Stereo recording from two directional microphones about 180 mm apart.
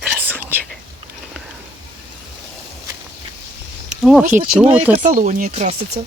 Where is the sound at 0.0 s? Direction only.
10° right (ahead or behind).